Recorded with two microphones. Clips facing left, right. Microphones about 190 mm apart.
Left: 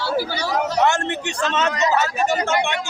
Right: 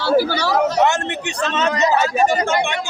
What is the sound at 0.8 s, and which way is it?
Speech, 20° right (ahead or behind).